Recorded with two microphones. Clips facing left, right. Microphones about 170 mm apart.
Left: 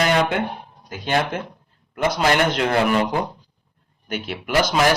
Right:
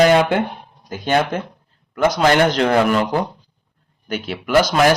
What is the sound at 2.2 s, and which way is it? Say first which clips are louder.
A man's voice: right 4 dB; 45° right (ahead or behind).